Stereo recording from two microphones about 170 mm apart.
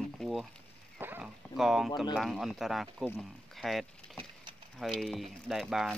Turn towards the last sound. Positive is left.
turn(degrees=0)  # may be behind; listen again after turning